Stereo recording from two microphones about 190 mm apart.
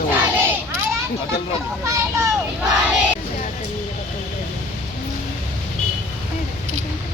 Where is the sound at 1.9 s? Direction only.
15° right (ahead or behind).